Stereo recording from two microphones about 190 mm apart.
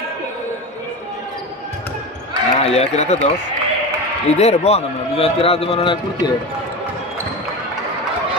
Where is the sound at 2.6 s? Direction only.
35° left (ahead or behind).